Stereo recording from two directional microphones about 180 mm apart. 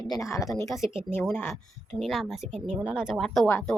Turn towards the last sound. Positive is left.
turn(degrees=5)  # may be behind; listen again after turning